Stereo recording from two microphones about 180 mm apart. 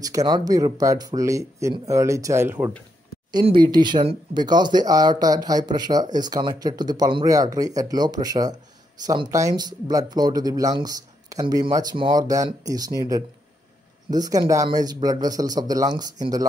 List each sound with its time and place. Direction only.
0.0 s speech: 20° right (ahead or behind)
3.4 s speech: 25° right (ahead or behind)
14.1 s speech: 20° right (ahead or behind)